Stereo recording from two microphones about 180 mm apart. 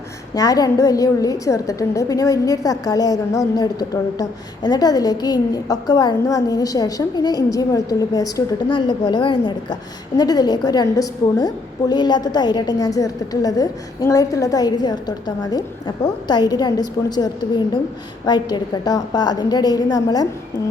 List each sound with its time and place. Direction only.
0.3 s a woman's voice: 20° left (ahead or behind)